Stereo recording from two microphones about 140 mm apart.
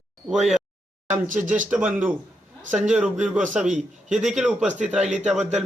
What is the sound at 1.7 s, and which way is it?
A man's voice, 10° right (ahead or behind).